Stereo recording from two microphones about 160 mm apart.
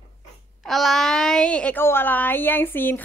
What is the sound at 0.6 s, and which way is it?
Speech, centre (ahead or behind).